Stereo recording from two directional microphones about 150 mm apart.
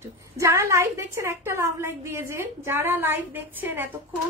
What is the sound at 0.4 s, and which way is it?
A woman's voice, 20° right (ahead or behind).